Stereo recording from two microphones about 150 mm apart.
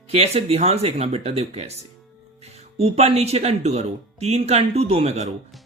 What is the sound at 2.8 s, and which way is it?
Speech, 45° right (ahead or behind).